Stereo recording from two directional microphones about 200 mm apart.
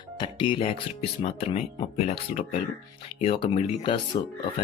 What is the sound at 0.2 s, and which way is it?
Speech, 25° left (ahead or behind).